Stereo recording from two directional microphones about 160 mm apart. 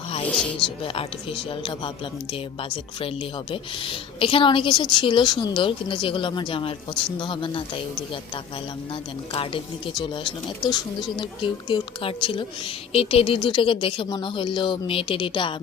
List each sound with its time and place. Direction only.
0.3 s speech: 5° left (ahead or behind)
0.6 s a woman's voice: 35° left (ahead or behind)
3.5 s a woman's voice: 35° left (ahead or behind)
9.3 s a woman's voice: 35° left (ahead or behind)